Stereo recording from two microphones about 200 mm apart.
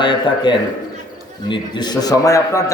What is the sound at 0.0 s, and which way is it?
A man's voice, 25° left (ahead or behind).